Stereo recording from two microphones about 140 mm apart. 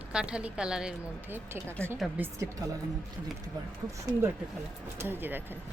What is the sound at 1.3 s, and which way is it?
A woman's voice, 15° right (ahead or behind).